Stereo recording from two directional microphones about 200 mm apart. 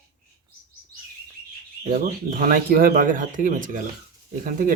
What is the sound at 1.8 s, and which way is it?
Speech, 45° right (ahead or behind).